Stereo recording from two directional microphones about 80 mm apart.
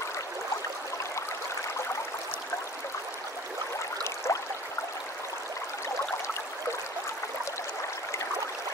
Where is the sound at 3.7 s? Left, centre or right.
Left.